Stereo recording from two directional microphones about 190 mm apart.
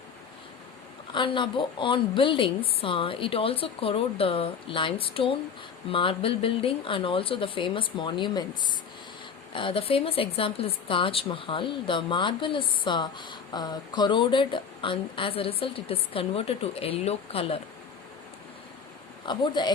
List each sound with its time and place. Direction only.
1.1 s a woman's voice: 25° left (ahead or behind)
9.6 s a woman's voice: 30° left (ahead or behind)
19.2 s a woman's voice: 25° left (ahead or behind)